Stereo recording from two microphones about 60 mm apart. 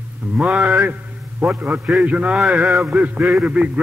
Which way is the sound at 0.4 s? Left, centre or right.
Centre.